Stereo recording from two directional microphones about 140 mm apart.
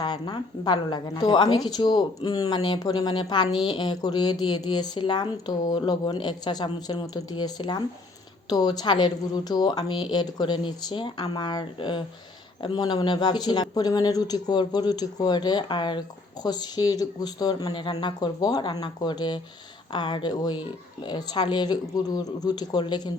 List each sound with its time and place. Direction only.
0.0 s a woman's voice: 35° left (ahead or behind)